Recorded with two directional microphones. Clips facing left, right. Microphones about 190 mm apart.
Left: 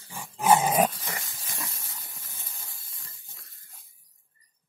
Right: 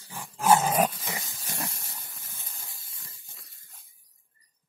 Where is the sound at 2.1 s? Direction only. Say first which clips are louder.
Left 1 dB; 15° left (ahead or behind).